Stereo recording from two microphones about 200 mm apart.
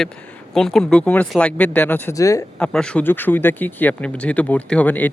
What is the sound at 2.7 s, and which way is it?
Speech, 5° left (ahead or behind).